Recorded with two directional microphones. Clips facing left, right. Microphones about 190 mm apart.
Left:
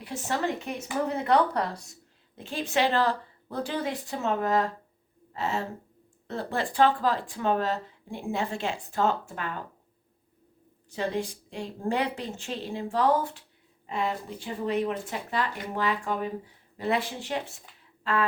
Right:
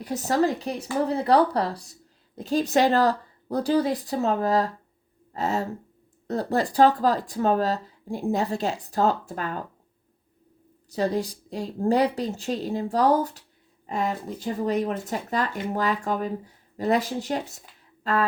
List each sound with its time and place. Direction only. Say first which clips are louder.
0.0 s speech: right 7 dB; 40° right (ahead or behind)
10.8 s speech: right 5 dB; 40° right (ahead or behind)